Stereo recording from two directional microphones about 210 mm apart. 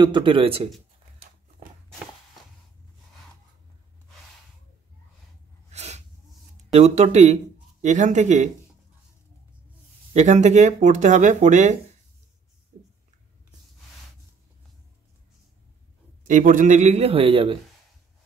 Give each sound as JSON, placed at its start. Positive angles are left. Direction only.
{"t": 0.0, "sound": "speech", "side_deg": -25}
{"t": 5.7, "sound": "sneeze", "side_deg": -30}
{"t": 6.7, "sound": "speech", "side_deg": -30}
{"t": 10.1, "sound": "speech", "side_deg": -35}
{"t": 16.3, "sound": "speech", "side_deg": -40}